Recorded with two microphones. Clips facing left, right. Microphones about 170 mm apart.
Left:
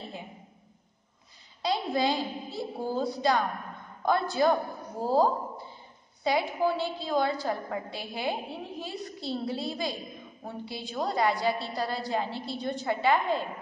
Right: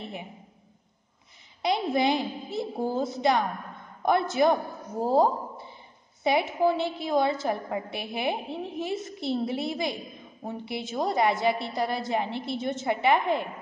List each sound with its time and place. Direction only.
1.6 s a woman's voice: 20° right (ahead or behind)